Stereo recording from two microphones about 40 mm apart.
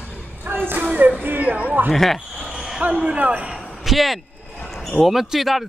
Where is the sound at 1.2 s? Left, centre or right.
Right.